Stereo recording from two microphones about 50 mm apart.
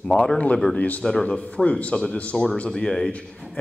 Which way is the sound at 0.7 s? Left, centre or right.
Left.